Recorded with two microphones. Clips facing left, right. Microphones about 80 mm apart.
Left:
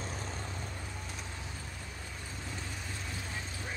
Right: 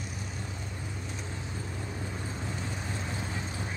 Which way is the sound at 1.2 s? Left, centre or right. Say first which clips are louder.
Right 5 dB; right.